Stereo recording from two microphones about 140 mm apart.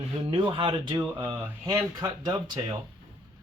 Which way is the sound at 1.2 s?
15° right (ahead or behind).